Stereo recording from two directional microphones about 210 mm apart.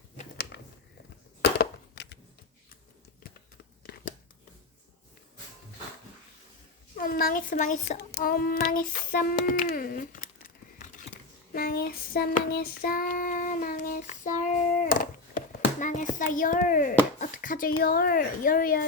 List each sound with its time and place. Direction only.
0.5 s a sound: 55° left (ahead or behind)
1.4 s crushing: 55° left (ahead or behind)
3.9 s a sound: 45° left (ahead or behind)
6.9 s speech: 45° left (ahead or behind)
8.1 s child singing: 45° left (ahead or behind)
15.8 s hands: 35° left (ahead or behind)
16.1 s speech: 40° left (ahead or behind)